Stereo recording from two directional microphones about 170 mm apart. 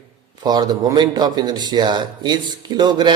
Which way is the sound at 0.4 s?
25° right (ahead or behind).